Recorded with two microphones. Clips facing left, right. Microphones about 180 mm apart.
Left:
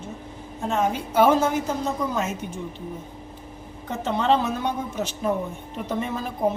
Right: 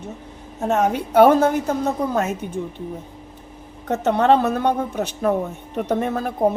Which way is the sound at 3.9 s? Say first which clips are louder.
Right 6 dB; 65° right (ahead or behind).